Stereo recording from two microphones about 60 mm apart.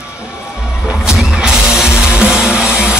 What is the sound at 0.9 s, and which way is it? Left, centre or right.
Music, centre.